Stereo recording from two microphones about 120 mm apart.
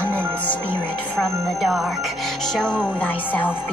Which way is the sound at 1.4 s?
Centre (ahead or behind).